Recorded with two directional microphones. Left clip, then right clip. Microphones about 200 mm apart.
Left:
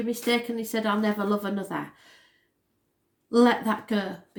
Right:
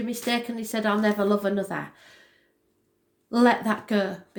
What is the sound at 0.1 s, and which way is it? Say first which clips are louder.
Speech: left 2 dB; 35° right (ahead or behind).